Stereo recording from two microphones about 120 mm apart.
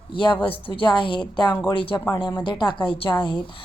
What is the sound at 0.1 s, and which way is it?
A woman's voice, 40° left (ahead or behind).